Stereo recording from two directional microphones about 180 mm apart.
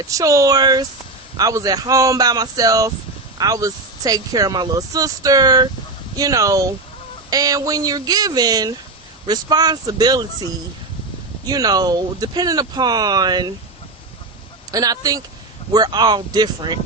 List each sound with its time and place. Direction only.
0.1 s speech: 20° right (ahead or behind)
11.4 s speech: 20° right (ahead or behind)
14.7 s speech: 20° right (ahead or behind)